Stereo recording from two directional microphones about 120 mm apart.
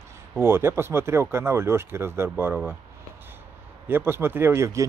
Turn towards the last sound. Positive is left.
turn(degrees=-25)  # may be behind; listen again after turning